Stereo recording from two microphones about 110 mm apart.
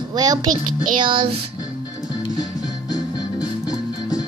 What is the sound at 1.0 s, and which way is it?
Music, 45° right (ahead or behind).